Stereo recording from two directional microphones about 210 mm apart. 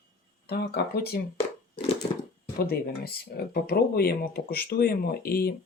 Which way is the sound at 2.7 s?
45° left (ahead or behind).